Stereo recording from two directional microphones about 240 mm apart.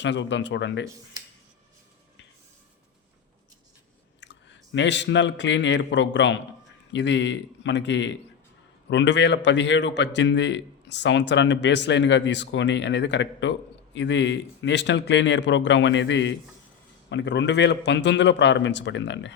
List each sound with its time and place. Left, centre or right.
0.0 s a man's voice: left
4.2 s a man's voice: left